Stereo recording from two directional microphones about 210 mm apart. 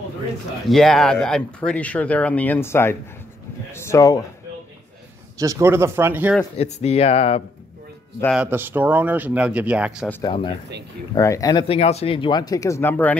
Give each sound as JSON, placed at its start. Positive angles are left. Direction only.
{"t": 0.7, "sound": "speech", "side_deg": 0}
{"t": 5.4, "sound": "speech", "side_deg": -15}
{"t": 6.6, "sound": "speech", "side_deg": 30}
{"t": 8.4, "sound": "speech", "side_deg": -10}
{"t": 10.2, "sound": "speech", "side_deg": 25}